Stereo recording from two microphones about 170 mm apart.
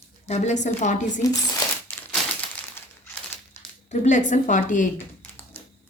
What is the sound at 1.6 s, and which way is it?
Crumpling, 25° left (ahead or behind).